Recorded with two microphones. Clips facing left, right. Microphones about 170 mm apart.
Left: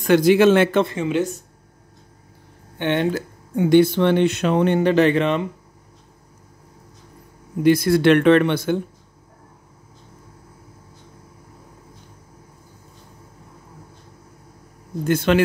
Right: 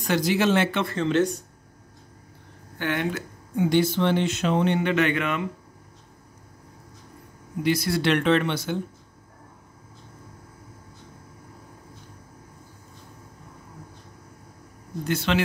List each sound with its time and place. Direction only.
0.0 s speech: 55° left (ahead or behind)
0.8 s speech: 10° left (ahead or behind)
2.8 s speech: 30° left (ahead or behind)
3.5 s speech: 55° left (ahead or behind)
4.7 s speech: 35° left (ahead or behind)
7.6 s speech: 50° left (ahead or behind)
15.0 s speech: 50° left (ahead or behind)